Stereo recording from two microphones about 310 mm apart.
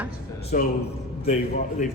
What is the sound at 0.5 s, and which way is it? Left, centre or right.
Speech, left.